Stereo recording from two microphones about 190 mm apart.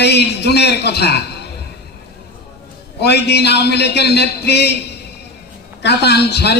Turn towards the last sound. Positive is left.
turn(degrees=60)  # may be behind; listen again after turning